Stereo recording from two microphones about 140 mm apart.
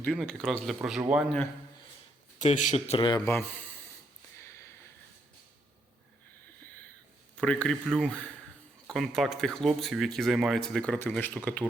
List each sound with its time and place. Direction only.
0.0 s speech: 5° left (ahead or behind)
2.4 s speech: 60° left (ahead or behind)
3.2 s speech: 15° left (ahead or behind)
4.4 s a sound: 20° left (ahead or behind)
7.3 s speech: 5° left (ahead or behind)